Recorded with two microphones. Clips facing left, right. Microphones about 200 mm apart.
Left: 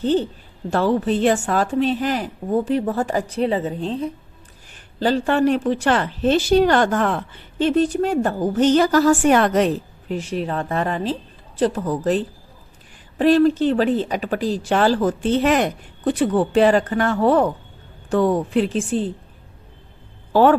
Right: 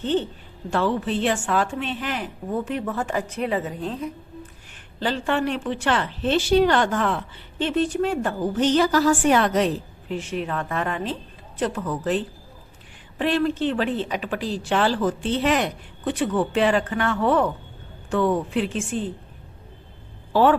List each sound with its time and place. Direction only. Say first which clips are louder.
0.0 s speech: left 4 dB; 40° left (ahead or behind)
4.7 s a woman's voice: left 7 dB; 40° left (ahead or behind)
10.1 s speech: left 3 dB; 40° left (ahead or behind)
20.3 s speech: left 4 dB; 45° left (ahead or behind)